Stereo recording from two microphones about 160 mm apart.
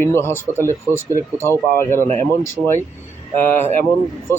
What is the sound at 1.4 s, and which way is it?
Speech, 15° left (ahead or behind).